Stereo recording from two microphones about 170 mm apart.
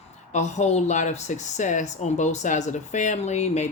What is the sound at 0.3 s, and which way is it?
Speech, 40° left (ahead or behind).